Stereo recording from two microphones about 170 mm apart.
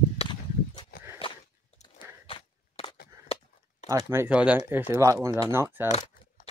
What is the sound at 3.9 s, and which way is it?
Speech, 20° right (ahead or behind).